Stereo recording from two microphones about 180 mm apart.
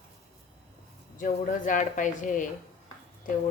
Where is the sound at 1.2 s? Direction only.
45° left (ahead or behind).